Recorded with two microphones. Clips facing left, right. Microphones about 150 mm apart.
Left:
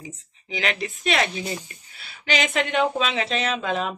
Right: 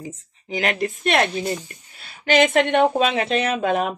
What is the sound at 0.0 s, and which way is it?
Speech, 45° right (ahead or behind).